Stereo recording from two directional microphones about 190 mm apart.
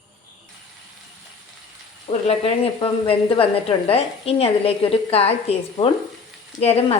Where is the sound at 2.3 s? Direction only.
30° left (ahead or behind).